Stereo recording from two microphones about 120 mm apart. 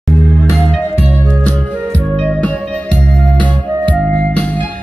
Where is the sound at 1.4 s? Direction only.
10° left (ahead or behind).